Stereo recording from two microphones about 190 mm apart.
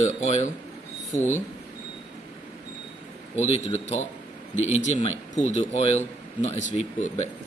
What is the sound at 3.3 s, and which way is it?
Speech, 35° left (ahead or behind).